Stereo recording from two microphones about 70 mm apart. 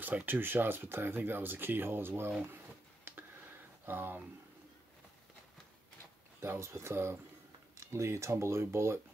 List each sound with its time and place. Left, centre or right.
0.0 s speech: right
3.1 s a sound: right
3.8 s speech: right
6.4 s speech: right